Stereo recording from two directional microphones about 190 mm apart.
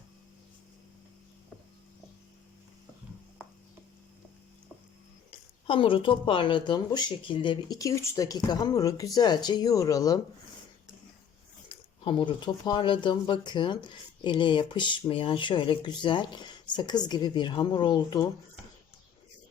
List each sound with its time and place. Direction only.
5.6 s speech: 25° left (ahead or behind)
11.7 s speech: 25° left (ahead or behind)